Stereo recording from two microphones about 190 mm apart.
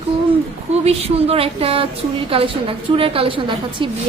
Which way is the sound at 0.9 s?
30° right (ahead or behind).